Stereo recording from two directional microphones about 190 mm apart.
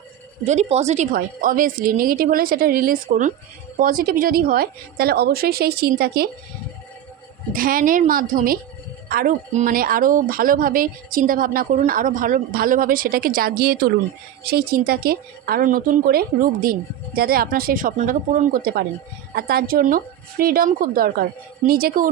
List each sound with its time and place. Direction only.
0.4 s a woman's voice: 35° right (ahead or behind); by 6.3 s 55° right (ahead or behind)
7.5 s a woman's voice: 50° right (ahead or behind)